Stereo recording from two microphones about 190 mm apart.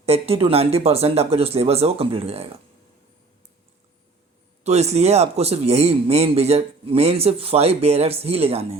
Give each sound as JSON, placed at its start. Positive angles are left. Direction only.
{"t": 0.0, "sound": "a man's voice", "side_deg": -30}
{"t": 4.6, "sound": "a man's voice", "side_deg": -35}